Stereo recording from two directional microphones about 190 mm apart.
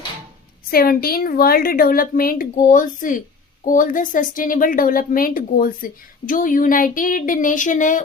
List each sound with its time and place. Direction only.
0.7 s a woman's voice: 50° left (ahead or behind)